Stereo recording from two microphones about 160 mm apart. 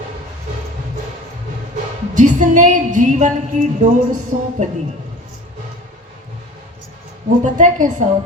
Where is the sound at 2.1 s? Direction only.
50° right (ahead or behind).